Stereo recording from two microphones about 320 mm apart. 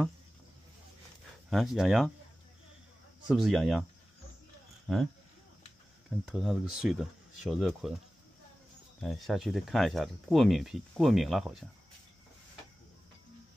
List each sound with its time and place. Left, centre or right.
1.5 s speech: centre
3.3 s speech: centre
6.0 s speech: centre
9.0 s speech: centre